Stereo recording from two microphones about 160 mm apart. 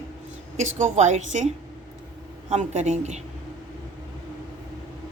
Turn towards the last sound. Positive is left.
turn(degrees=-45)  # may be behind; listen again after turning